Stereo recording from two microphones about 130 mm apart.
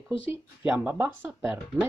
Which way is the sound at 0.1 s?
45° left (ahead or behind).